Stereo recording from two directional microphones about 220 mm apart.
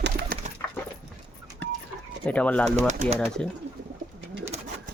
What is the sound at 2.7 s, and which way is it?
Speech, 30° right (ahead or behind).